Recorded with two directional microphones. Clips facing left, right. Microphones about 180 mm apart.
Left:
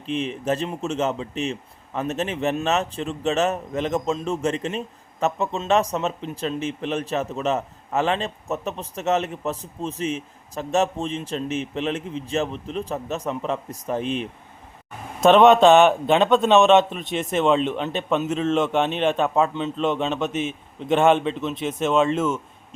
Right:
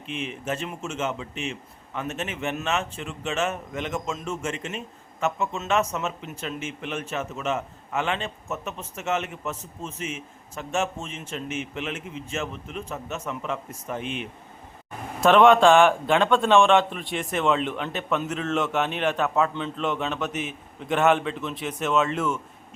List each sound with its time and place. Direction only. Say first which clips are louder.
0.1 s speech: left 6 dB; 35° left (ahead or behind)
15.2 s a man's voice: left 3 dB; 25° left (ahead or behind)